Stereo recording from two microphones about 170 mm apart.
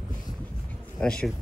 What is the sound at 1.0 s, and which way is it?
Speech, 5° left (ahead or behind).